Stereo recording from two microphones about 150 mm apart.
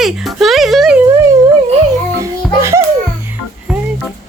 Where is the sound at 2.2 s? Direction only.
20° right (ahead or behind).